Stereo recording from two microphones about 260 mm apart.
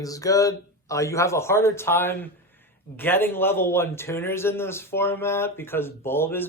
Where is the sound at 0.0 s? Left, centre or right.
Centre.